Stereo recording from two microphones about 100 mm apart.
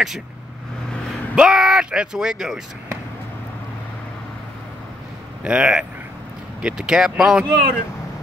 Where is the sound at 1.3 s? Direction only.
5° right (ahead or behind).